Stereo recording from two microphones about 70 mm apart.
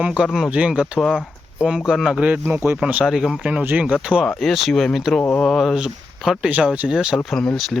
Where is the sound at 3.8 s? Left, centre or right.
Centre.